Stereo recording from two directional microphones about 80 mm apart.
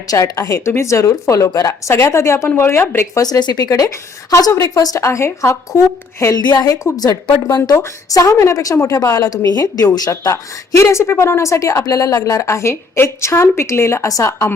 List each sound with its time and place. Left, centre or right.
0.1 s a woman's voice: left
3.2 s a woman's voice: left
5.0 s a woman's voice: left
6.3 s a woman's voice: left
6.9 s a woman's voice: left